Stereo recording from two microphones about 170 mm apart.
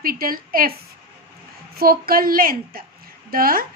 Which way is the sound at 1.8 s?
60° right (ahead or behind).